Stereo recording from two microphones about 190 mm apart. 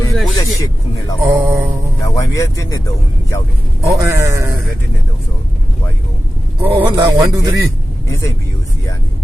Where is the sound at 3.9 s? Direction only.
15° right (ahead or behind).